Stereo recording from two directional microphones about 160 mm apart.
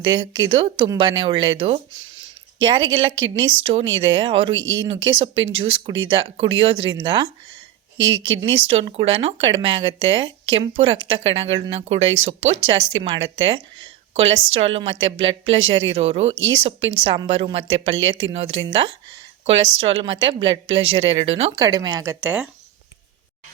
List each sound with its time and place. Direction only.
0.0 s a woman's voice: 25° right (ahead or behind)
8.4 s a woman's voice: 35° right (ahead or behind)
19.5 s a woman's voice: 35° right (ahead or behind)
21.6 s speech: 25° right (ahead or behind)
22.2 s speech: 10° right (ahead or behind)